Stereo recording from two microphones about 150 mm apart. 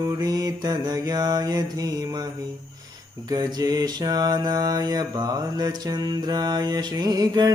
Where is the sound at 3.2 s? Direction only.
25° right (ahead or behind).